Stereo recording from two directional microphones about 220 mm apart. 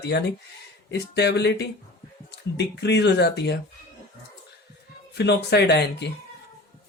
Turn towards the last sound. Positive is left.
turn(degrees=50)  # may be behind; listen again after turning